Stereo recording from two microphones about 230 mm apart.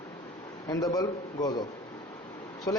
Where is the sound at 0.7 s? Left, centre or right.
Centre.